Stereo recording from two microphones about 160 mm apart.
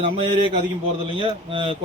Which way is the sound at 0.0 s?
35° right (ahead or behind).